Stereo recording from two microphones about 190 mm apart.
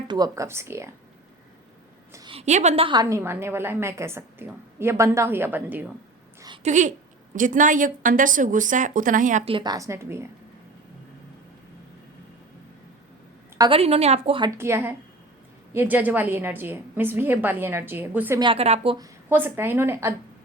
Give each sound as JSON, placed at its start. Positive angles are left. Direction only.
{"t": 0.1, "sound": "a woman's voice", "side_deg": -20}
{"t": 2.1, "sound": "a woman's voice", "side_deg": -25}
{"t": 6.6, "sound": "a woman's voice", "side_deg": -40}
{"t": 13.6, "sound": "a woman's voice", "side_deg": -30}
{"t": 14.6, "sound": "a woman's voice", "side_deg": -15}
{"t": 18.3, "sound": "a woman's voice", "side_deg": -30}
{"t": 18.9, "sound": "a woman's voice", "side_deg": -15}